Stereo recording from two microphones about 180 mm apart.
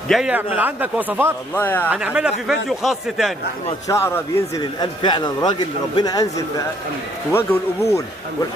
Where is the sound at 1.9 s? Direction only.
5° right (ahead or behind).